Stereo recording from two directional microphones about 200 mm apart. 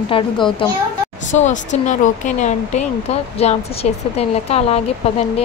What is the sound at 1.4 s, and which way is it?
Speech, 35° left (ahead or behind).